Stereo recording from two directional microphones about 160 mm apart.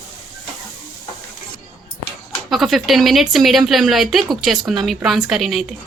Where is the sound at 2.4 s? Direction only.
Centre (ahead or behind).